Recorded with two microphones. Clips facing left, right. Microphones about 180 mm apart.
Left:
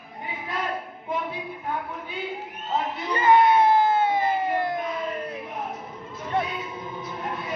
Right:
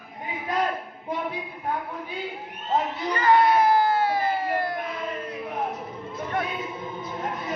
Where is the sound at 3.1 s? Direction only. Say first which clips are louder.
Left 1 dB; 20° left (ahead or behind).